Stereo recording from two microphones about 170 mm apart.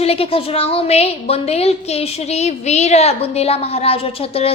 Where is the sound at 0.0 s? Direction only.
35° left (ahead or behind).